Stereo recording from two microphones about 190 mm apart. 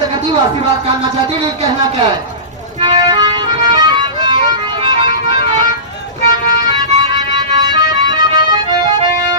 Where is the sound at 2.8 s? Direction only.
20° right (ahead or behind).